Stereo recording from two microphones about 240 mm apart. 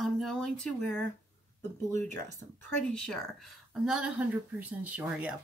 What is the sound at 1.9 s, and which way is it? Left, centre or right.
Speech, right.